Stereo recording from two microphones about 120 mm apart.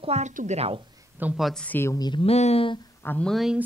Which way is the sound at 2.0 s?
35° left (ahead or behind).